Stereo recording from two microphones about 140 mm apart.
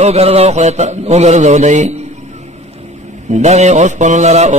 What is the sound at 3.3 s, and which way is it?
Mantra, 50° right (ahead or behind).